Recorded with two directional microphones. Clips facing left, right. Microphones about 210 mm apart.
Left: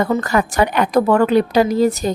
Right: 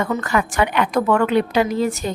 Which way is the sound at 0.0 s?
35° left (ahead or behind).